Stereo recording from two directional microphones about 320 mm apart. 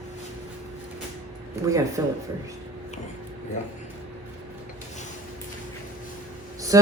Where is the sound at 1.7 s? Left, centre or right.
Centre.